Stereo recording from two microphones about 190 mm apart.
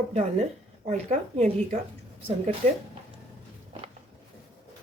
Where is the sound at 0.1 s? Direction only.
35° right (ahead or behind).